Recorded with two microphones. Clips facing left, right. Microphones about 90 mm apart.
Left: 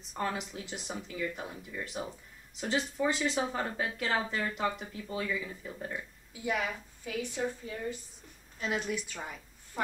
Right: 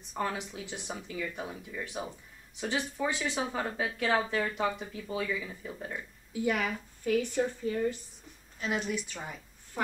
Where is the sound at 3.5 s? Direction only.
Centre (ahead or behind).